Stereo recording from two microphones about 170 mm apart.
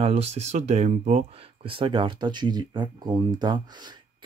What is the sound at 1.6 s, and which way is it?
Speech, 30° right (ahead or behind).